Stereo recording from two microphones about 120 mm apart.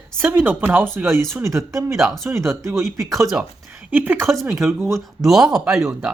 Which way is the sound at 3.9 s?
15° right (ahead or behind).